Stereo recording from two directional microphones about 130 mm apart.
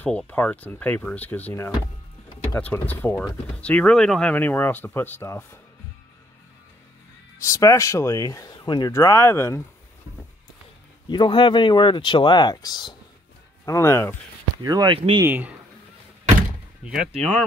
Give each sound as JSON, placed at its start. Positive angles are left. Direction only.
{"t": 0.0, "sound": "speech", "side_deg": 10}
{"t": 2.5, "sound": "speech", "side_deg": 15}
{"t": 7.3, "sound": "speech", "side_deg": 25}
{"t": 8.5, "sound": "speech", "side_deg": 35}
{"t": 8.9, "sound": "speech", "side_deg": 25}
{"t": 11.1, "sound": "speech", "side_deg": 35}
{"t": 13.7, "sound": "speech", "side_deg": 20}
{"t": 14.6, "sound": "speech", "side_deg": -30}
{"t": 15.2, "sound": "speech", "side_deg": -10}
{"t": 16.8, "sound": "speech", "side_deg": -10}
{"t": 17.2, "sound": "speech", "side_deg": 5}